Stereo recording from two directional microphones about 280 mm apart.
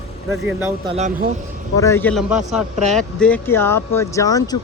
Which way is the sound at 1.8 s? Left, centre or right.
Centre.